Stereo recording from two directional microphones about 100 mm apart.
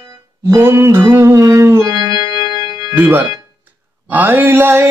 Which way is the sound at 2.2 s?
45° right (ahead or behind).